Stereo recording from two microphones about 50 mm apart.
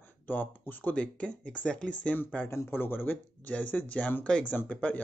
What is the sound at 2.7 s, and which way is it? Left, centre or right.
Speech, left.